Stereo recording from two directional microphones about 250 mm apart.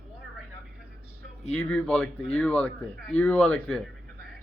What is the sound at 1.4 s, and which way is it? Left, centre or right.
Speech, centre.